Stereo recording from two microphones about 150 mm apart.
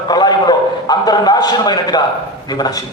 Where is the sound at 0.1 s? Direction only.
25° left (ahead or behind).